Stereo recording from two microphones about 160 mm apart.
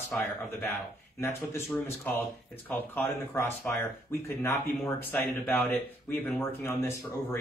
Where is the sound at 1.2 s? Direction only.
15° left (ahead or behind).